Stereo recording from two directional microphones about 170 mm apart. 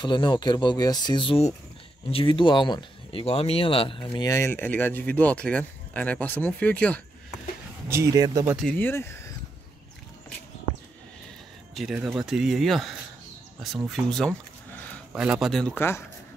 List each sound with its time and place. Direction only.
0.0 s speech: 25° left (ahead or behind); by 7.0 s 10° left (ahead or behind)
7.9 s speech: 20° right (ahead or behind)
8.7 s speech: 15° left (ahead or behind)
11.7 s speech: 5° right (ahead or behind)
15.1 s speech: 5° right (ahead or behind); by 16.0 s 10° left (ahead or behind)